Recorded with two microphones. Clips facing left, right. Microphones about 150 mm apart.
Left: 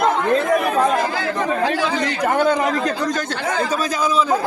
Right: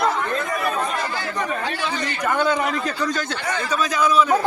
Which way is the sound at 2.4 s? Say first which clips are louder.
Left 3 dB; 45° left (ahead or behind).